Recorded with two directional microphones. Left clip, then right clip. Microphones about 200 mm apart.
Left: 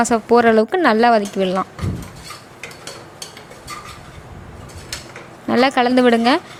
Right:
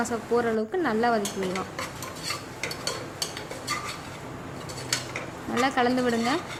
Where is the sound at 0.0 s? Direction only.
45° left (ahead or behind).